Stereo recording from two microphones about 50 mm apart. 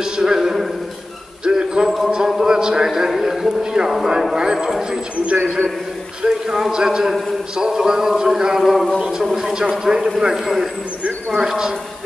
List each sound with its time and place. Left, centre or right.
0.0 s a sound: centre
4.6 s a man's voice: centre
6.2 s a man's voice: centre
8.9 s a man's voice: centre